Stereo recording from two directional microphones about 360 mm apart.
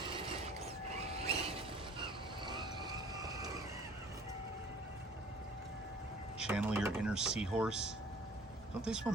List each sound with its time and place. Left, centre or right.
1.2 s a sound: centre
2.0 s vehicle: centre
6.4 s speech: centre